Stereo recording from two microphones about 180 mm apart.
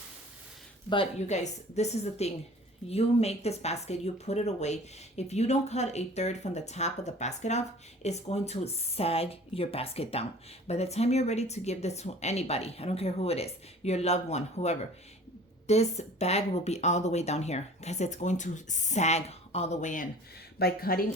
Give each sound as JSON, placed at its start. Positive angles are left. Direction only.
{"t": 1.3, "sound": "speech", "side_deg": 40}
{"t": 20.6, "sound": "speech", "side_deg": 60}